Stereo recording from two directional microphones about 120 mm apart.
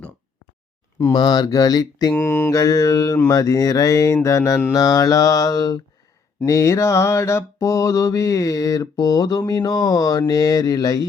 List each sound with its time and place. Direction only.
0.9 s mantra: 30° left (ahead or behind)
2.1 s mantra: 15° left (ahead or behind)
2.5 s mantra: 30° left (ahead or behind)